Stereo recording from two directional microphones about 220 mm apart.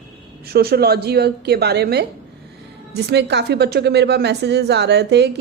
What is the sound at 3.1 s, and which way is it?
A woman's voice, 50° right (ahead or behind).